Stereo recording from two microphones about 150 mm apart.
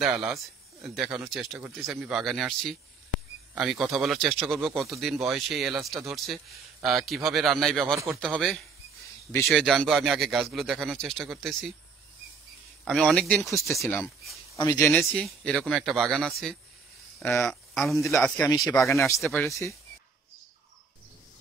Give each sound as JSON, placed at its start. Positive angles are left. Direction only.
{"t": 0.0, "sound": "speech", "side_deg": -5}
{"t": 12.8, "sound": "speech", "side_deg": 5}
{"t": 13.5, "sound": "speech", "side_deg": 20}
{"t": 14.2, "sound": "a sound", "side_deg": 0}
{"t": 14.6, "sound": "speech", "side_deg": 20}
{"t": 17.2, "sound": "speech", "side_deg": 15}
{"t": 17.5, "sound": "speech", "side_deg": 0}
{"t": 18.9, "sound": "speech", "side_deg": 20}
{"t": 19.2, "sound": "speech", "side_deg": 0}